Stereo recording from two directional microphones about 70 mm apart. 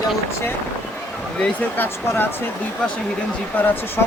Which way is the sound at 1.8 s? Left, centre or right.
Left.